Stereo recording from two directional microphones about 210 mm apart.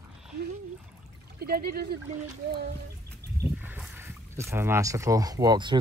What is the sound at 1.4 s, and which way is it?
Speech, 45° right (ahead or behind).